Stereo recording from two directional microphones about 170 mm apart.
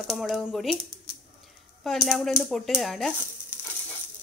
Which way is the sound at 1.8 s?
Centre (ahead or behind).